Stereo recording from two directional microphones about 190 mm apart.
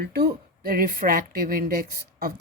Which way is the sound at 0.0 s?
55° right (ahead or behind).